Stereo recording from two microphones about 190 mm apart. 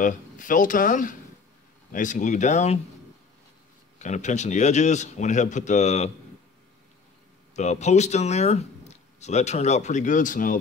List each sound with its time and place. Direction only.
0.0 s speech: 45° left (ahead or behind)
4.0 s speech: 40° left (ahead or behind)
7.5 s speech: 35° left (ahead or behind)